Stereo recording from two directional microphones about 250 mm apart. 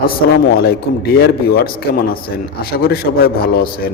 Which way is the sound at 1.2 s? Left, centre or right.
Left.